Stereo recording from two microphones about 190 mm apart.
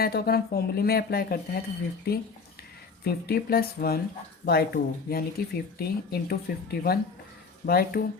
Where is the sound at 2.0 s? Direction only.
55° left (ahead or behind).